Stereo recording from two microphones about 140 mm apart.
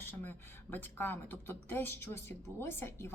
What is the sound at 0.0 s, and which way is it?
Speech, 15° left (ahead or behind).